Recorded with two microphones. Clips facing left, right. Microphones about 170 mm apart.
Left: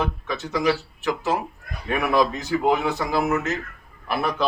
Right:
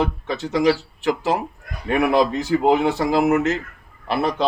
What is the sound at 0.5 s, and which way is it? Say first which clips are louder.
Speech: right 4 dB; 30° right (ahead or behind).